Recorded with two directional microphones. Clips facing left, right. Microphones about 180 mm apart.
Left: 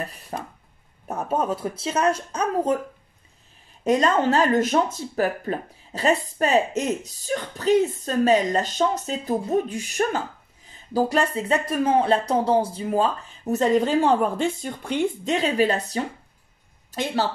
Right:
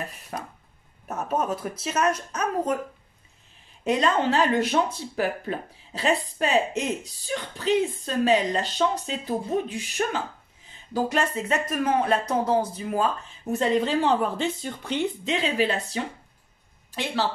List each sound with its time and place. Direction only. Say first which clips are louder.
0.3 s speech: left 2 dB; 30° left (ahead or behind)
3.8 s speech: left 3 dB; 45° left (ahead or behind)
13.6 s speech: left 3 dB; 45° left (ahead or behind)